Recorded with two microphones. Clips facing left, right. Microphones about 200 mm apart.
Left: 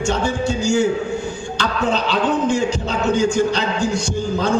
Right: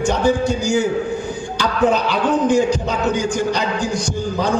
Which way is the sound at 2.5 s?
15° right (ahead or behind).